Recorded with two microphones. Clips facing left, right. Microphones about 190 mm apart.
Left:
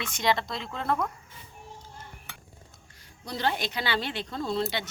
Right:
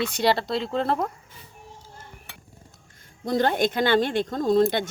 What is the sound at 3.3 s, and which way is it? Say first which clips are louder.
A woman's voice: right 8 dB; 50° right (ahead or behind).